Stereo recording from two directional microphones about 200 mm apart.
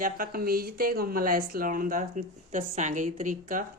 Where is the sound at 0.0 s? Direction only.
45° right (ahead or behind).